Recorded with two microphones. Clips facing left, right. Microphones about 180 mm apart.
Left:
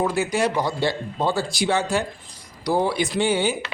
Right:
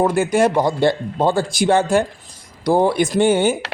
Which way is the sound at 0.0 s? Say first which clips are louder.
Right 6 dB; 50° right (ahead or behind).